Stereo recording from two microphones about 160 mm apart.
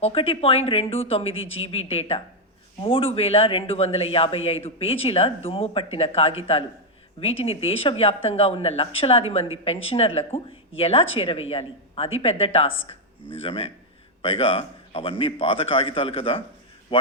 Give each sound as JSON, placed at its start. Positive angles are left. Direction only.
{"t": 0.0, "sound": "speech", "side_deg": 35}